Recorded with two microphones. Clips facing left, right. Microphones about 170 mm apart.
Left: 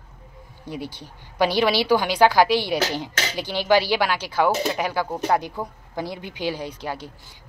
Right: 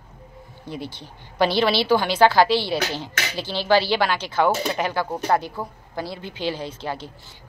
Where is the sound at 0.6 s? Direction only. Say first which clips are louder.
Left 1 dB; 10° left (ahead or behind).